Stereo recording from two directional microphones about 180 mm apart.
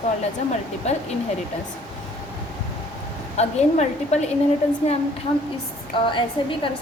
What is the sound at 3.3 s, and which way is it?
Speech, 40° left (ahead or behind).